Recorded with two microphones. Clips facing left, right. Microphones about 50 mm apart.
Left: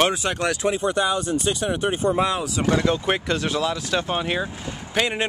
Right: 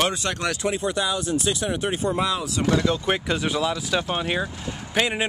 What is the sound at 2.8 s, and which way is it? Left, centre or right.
Speech, centre.